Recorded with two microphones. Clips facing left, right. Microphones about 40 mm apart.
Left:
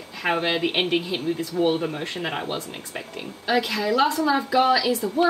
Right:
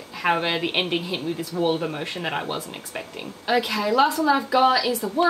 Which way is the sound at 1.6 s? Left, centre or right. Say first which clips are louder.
Left 1 dB; centre.